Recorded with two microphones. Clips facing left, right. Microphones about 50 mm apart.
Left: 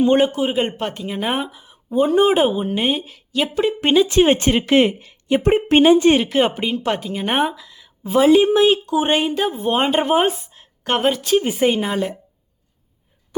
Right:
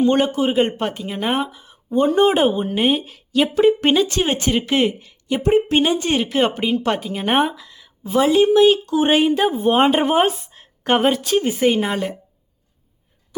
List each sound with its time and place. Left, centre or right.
0.0 s a woman's voice: centre
0.4 s a woman's voice: centre
4.0 s speech: centre
4.4 s speech: left
6.1 s a woman's voice: centre
6.6 s a woman's voice: centre
8.0 s a woman's voice: centre
10.5 s a sound: centre
11.7 s a woman's voice: centre